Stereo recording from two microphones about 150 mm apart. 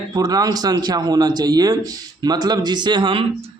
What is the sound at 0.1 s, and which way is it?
A man's voice, 25° right (ahead or behind).